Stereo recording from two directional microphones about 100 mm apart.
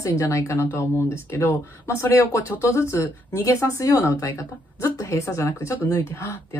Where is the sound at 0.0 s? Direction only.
30° left (ahead or behind).